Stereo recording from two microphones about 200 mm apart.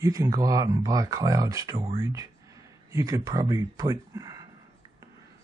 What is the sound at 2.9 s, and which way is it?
Speech, 15° right (ahead or behind).